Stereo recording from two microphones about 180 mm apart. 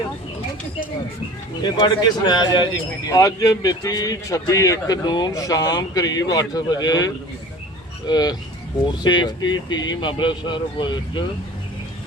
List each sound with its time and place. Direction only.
1.6 s a man's voice: 25° left (ahead or behind)